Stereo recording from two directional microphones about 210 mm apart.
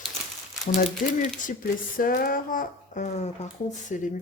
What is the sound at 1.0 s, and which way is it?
Speech, 40° left (ahead or behind).